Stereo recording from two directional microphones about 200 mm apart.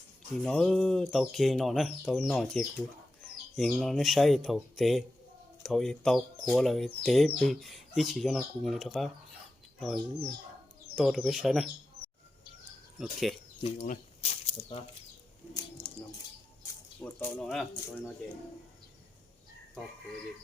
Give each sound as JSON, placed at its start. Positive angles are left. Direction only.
{"t": 0.4, "sound": "speech", "side_deg": 5}
{"t": 10.9, "sound": "speech", "side_deg": 0}
{"t": 13.0, "sound": "speech", "side_deg": 0}
{"t": 13.6, "sound": "speech", "side_deg": 30}
{"t": 17.0, "sound": "speech", "side_deg": 10}